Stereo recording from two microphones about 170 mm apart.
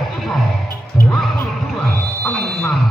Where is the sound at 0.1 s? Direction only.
Centre (ahead or behind).